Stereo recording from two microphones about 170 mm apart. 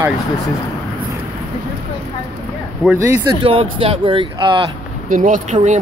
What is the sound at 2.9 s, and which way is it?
Speech, 15° right (ahead or behind).